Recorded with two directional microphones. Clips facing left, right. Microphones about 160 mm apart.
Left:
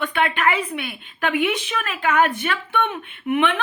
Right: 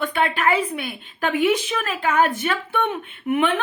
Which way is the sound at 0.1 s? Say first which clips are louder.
Right 1 dB; 35° right (ahead or behind).